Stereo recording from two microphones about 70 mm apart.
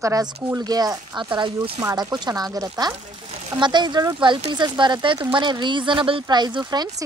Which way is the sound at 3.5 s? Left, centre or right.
Right.